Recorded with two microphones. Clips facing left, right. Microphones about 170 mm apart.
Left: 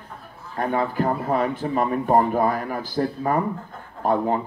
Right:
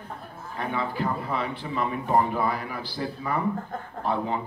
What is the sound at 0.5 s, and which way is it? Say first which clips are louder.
Speech: left 6 dB; 45° left (ahead or behind).